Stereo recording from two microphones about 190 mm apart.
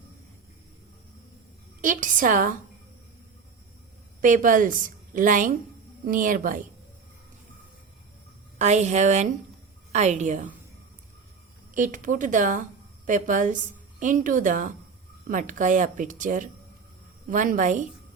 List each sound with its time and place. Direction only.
1.8 s speech: 45° right (ahead or behind)
4.2 s speech: 45° right (ahead or behind)
8.5 s a woman's voice: 40° right (ahead or behind)
11.7 s speech: 45° right (ahead or behind)